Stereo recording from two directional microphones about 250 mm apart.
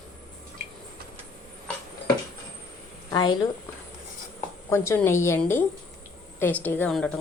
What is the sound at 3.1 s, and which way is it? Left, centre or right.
Speech, centre.